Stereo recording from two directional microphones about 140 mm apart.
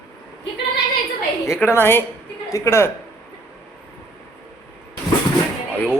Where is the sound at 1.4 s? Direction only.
20° left (ahead or behind).